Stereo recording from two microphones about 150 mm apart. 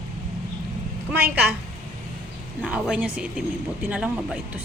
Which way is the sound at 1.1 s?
15° right (ahead or behind).